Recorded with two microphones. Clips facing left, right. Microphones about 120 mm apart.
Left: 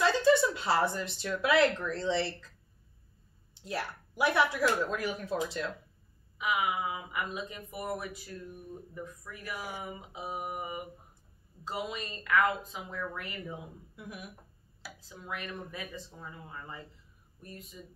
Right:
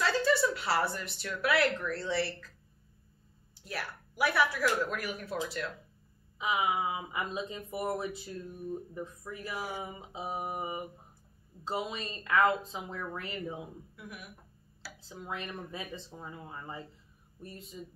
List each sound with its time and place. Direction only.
0.0 s speech: 20° left (ahead or behind)
3.6 s speech: 25° left (ahead or behind)
6.3 s speech: 25° right (ahead or behind)
13.9 s speech: 20° left (ahead or behind)
15.0 s speech: 30° right (ahead or behind)